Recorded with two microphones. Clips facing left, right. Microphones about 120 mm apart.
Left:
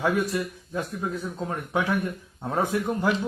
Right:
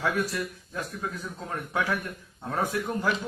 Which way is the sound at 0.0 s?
20° left (ahead or behind).